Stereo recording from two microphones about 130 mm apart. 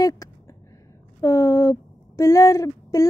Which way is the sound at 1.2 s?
25° left (ahead or behind).